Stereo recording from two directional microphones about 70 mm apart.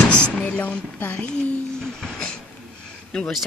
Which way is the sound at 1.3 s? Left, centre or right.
Centre.